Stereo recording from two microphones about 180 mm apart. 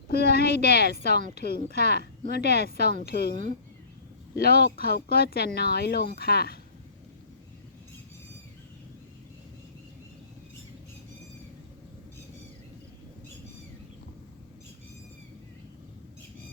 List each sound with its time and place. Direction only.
0.1 s a woman's voice: 60° left (ahead or behind)
4.4 s speech: 60° left (ahead or behind)